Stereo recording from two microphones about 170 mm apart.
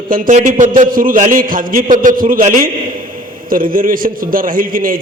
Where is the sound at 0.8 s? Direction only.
55° right (ahead or behind).